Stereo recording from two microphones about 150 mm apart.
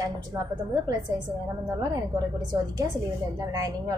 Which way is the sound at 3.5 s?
25° right (ahead or behind).